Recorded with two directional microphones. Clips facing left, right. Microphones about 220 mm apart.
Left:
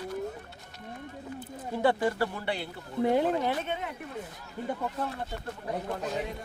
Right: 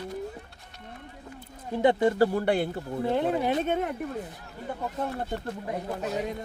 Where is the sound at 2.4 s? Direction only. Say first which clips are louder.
Right 9 dB; 50° right (ahead or behind).